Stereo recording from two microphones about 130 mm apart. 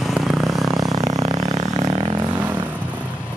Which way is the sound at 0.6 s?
25° right (ahead or behind).